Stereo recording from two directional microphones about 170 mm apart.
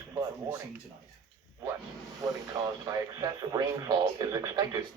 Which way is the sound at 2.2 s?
20° right (ahead or behind).